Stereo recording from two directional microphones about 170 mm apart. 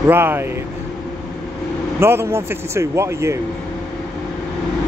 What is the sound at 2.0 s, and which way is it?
Speech, 15° right (ahead or behind).